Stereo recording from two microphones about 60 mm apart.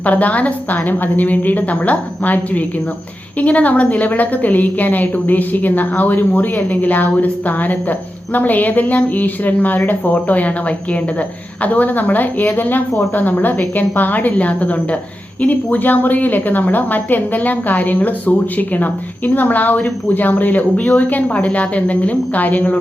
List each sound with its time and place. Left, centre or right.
0.0 s a woman's voice: left